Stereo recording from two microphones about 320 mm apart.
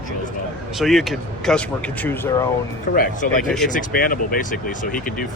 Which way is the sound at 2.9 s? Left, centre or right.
Left.